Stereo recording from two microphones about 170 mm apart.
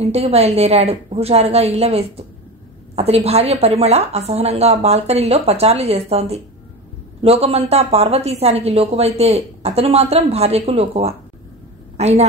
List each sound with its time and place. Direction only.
0.0 s a woman's voice: 35° right (ahead or behind)